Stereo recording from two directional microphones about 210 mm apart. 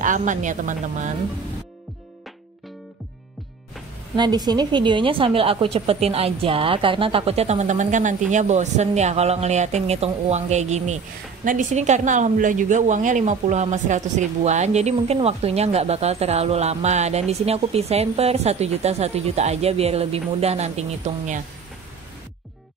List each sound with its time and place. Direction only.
0.0 s a woman's voice: 35° right (ahead or behind)
4.2 s a woman's voice: 20° right (ahead or behind)